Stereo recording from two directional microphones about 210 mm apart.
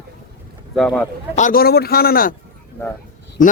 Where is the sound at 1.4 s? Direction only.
40° left (ahead or behind).